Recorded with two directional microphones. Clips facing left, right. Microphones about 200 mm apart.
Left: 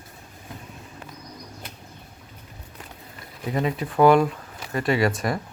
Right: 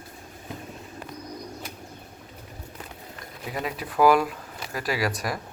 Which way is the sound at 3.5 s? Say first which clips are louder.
Left 6 dB; 5° right (ahead or behind).